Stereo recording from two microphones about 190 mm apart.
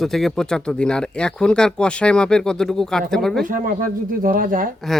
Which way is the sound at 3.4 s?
45° right (ahead or behind).